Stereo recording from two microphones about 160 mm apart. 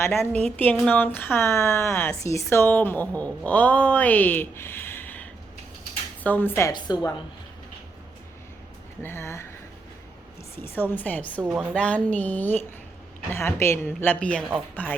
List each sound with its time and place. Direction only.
0.0 s a woman's voice: 15° left (ahead or behind)
6.7 s a woman's voice: 25° left (ahead or behind)
9.0 s speech: 15° left (ahead or behind)
10.6 s a woman's voice: 15° left (ahead or behind)